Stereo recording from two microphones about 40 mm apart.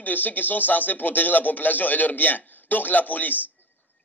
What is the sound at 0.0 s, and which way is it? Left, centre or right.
Speech, left.